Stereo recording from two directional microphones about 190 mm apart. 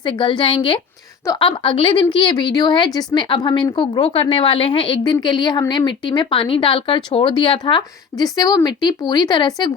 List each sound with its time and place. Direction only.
0.0 s a woman's voice: 25° left (ahead or behind)